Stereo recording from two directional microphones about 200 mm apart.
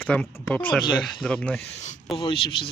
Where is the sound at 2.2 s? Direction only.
25° left (ahead or behind).